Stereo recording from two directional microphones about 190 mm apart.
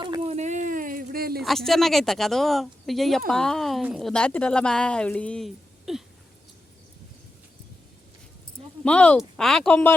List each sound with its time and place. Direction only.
0.0 s a sound: 25° right (ahead or behind); by 1.4 s 50° right (ahead or behind)
1.4 s speech: centre (ahead or behind)
8.8 s speech: 5° left (ahead or behind)